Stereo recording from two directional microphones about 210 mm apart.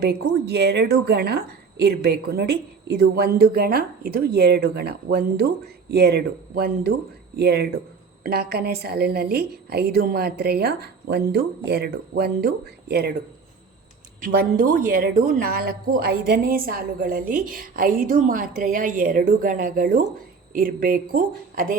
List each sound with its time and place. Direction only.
0.0 s a woman's voice: 50° right (ahead or behind)
14.2 s a woman's voice: 40° right (ahead or behind)